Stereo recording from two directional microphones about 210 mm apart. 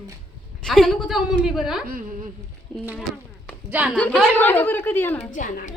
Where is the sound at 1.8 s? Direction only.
40° right (ahead or behind).